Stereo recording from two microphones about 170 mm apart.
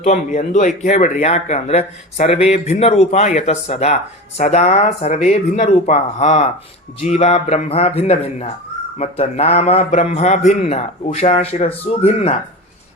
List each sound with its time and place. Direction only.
0.0 s speech: 45° left (ahead or behind)